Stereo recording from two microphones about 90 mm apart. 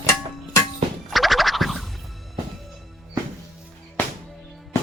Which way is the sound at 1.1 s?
Centre (ahead or behind).